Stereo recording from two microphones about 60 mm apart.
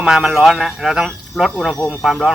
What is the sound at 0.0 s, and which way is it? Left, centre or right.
Speech, centre.